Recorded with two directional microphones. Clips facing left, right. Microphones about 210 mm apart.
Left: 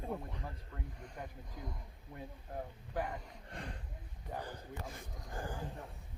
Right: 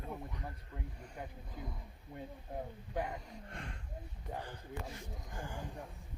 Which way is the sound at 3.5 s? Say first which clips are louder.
Left 3 dB; 35° left (ahead or behind).